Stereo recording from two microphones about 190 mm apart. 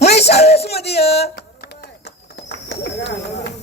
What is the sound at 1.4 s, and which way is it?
Clip-clop, 55° left (ahead or behind).